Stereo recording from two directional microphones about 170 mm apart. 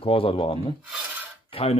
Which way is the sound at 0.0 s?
35° left (ahead or behind).